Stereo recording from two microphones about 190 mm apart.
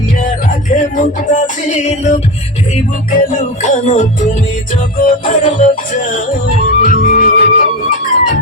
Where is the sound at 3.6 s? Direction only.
35° left (ahead or behind).